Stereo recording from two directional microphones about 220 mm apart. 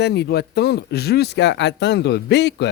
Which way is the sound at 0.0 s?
50° left (ahead or behind).